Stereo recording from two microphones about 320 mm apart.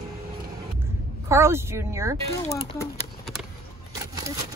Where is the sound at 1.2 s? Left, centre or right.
Centre.